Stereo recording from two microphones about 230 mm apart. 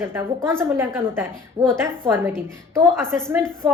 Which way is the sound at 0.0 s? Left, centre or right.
Centre.